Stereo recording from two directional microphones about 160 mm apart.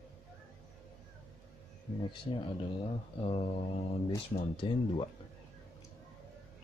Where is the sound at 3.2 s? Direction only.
40° left (ahead or behind).